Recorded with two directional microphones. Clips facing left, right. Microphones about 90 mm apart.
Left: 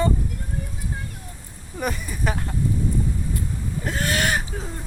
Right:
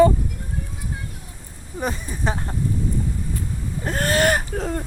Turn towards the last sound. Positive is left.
turn(degrees=-65)  # may be behind; listen again after turning